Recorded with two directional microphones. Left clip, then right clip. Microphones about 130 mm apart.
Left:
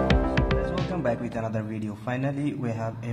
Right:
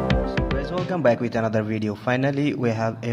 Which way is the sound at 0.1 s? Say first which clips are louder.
Right 1 dB; centre (ahead or behind).